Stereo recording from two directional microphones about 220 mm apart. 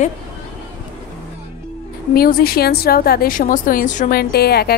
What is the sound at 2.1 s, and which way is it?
A woman's voice, 45° left (ahead or behind).